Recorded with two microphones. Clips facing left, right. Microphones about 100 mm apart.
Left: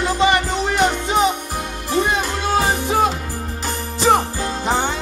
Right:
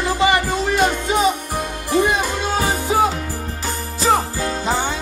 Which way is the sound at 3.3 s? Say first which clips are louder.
Even; 20° left (ahead or behind).